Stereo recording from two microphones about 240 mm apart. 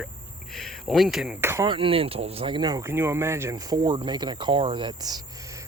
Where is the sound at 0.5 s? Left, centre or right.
Centre.